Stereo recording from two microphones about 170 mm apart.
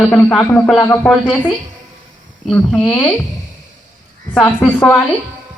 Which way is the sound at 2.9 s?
10° left (ahead or behind).